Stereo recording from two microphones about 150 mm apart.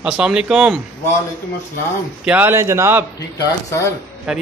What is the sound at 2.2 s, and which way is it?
Speech, 15° right (ahead or behind).